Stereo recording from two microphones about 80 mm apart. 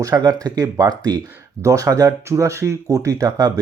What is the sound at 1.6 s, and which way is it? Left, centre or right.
Speech, right.